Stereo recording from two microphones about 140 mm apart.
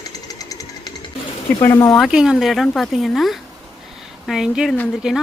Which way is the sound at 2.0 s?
Centre (ahead or behind).